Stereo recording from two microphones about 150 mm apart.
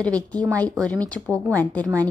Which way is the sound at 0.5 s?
10° left (ahead or behind).